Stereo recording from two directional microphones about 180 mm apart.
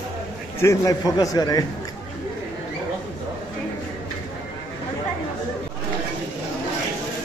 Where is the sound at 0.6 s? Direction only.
20° left (ahead or behind).